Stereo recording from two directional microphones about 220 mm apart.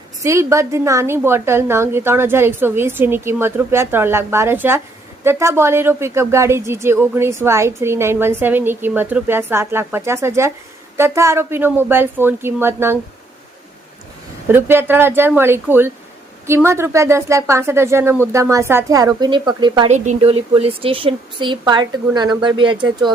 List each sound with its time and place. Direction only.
0.2 s a woman's voice: 15° right (ahead or behind)
14.4 s a woman's voice: 10° right (ahead or behind)